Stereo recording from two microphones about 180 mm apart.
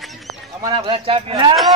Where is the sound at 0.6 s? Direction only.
20° right (ahead or behind).